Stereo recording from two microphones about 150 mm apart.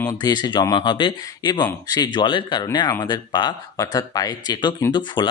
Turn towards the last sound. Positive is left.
turn(degrees=30)  # may be behind; listen again after turning